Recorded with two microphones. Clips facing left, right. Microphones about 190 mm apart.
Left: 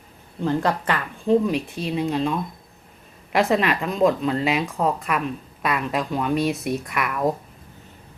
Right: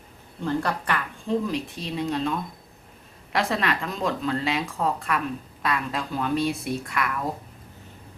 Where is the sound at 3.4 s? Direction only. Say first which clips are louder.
Left 5 dB; 15° left (ahead or behind).